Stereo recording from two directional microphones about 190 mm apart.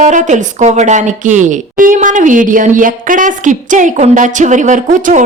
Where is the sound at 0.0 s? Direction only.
40° right (ahead or behind).